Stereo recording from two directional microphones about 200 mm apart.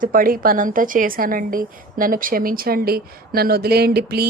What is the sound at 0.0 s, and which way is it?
A woman's voice, 45° right (ahead or behind).